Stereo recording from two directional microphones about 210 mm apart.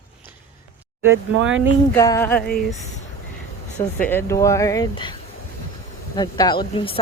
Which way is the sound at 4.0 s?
10° left (ahead or behind).